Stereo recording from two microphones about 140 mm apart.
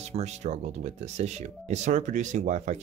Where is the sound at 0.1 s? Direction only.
55° right (ahead or behind).